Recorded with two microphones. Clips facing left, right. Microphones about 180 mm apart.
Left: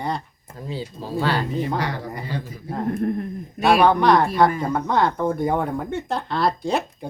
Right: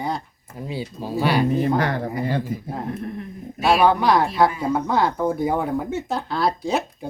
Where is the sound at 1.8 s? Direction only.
50° right (ahead or behind).